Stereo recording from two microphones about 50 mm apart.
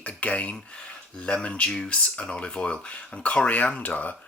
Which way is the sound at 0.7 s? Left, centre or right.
Left.